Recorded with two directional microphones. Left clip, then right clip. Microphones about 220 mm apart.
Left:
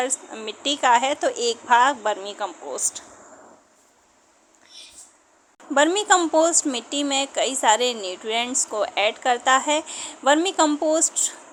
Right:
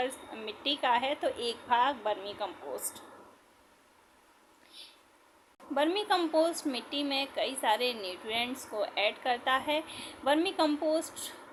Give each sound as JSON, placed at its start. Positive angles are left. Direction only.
{"t": 0.3, "sound": "a woman's voice", "side_deg": 25}
{"t": 5.7, "sound": "a woman's voice", "side_deg": 30}